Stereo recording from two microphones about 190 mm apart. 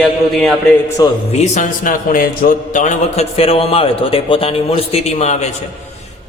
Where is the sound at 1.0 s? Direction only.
20° left (ahead or behind).